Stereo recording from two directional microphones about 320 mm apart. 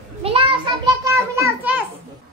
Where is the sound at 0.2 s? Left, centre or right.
Centre.